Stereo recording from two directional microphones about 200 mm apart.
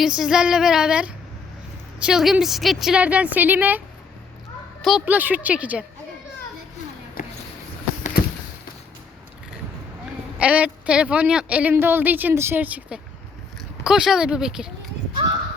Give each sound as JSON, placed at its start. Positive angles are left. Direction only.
{"t": 0.0, "sound": "a woman's voice", "side_deg": -5}
{"t": 7.2, "sound": "a sound", "side_deg": 40}
{"t": 10.3, "sound": "a woman's voice", "side_deg": -5}